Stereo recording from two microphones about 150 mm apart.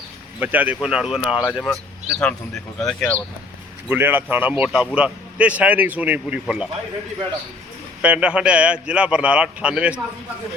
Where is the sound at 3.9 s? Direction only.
15° right (ahead or behind).